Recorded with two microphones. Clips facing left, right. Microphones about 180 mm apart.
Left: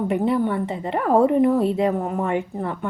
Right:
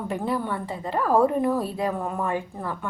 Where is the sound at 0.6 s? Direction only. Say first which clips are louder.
Left 3 dB; 20° left (ahead or behind).